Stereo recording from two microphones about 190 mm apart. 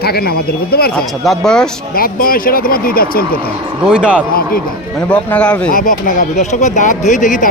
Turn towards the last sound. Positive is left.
turn(degrees=45)  # may be behind; listen again after turning